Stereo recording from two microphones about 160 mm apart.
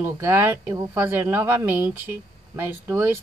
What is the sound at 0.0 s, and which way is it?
Speech, 15° right (ahead or behind).